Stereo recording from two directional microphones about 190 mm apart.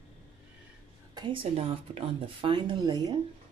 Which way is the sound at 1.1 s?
30° right (ahead or behind).